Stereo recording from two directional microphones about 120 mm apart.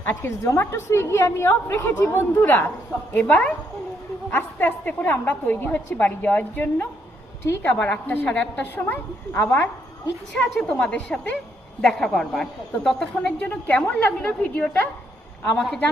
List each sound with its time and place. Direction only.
0.0 s a woman's voice: 20° left (ahead or behind)
7.7 s a woman's voice: 10° left (ahead or behind)
10.3 s a woman's voice: 5° left (ahead or behind)